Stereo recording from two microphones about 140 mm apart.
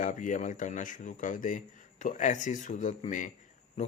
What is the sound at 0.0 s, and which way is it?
A man's voice, 65° left (ahead or behind).